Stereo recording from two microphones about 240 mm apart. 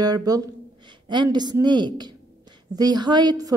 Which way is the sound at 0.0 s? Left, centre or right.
Centre.